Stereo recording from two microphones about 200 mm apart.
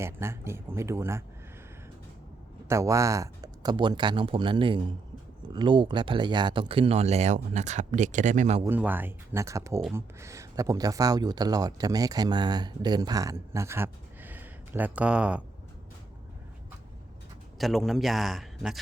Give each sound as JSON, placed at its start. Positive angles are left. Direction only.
{"t": 0.0, "sound": "speech", "side_deg": -15}
{"t": 2.6, "sound": "speech", "side_deg": -15}
{"t": 8.6, "sound": "speech", "side_deg": -10}
{"t": 17.6, "sound": "a man's voice", "side_deg": 0}